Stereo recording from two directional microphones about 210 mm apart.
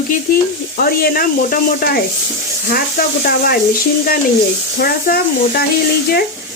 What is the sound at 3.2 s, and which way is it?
Speech, 45° left (ahead or behind).